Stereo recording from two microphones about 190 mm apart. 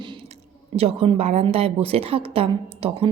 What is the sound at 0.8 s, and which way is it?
A woman's voice, 30° right (ahead or behind).